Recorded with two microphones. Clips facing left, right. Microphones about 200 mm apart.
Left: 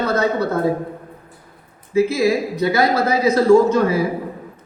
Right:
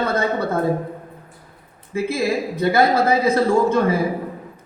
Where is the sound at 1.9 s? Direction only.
55° right (ahead or behind).